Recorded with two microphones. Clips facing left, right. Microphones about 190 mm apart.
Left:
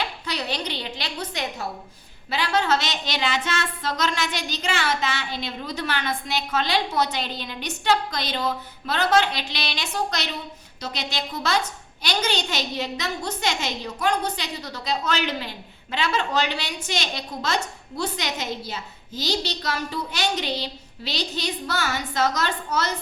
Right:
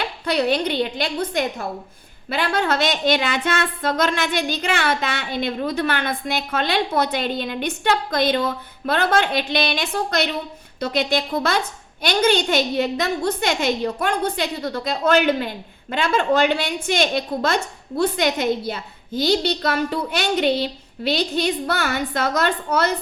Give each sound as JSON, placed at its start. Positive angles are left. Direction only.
{"t": 0.0, "sound": "a woman's voice", "side_deg": -55}